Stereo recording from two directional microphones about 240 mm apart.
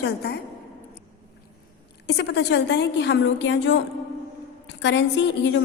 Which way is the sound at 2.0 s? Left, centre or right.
Left.